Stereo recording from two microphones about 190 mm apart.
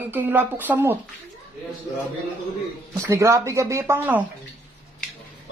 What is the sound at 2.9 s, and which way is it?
Speech, 15° right (ahead or behind).